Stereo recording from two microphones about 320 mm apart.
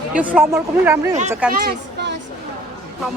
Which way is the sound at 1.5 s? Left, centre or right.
Right.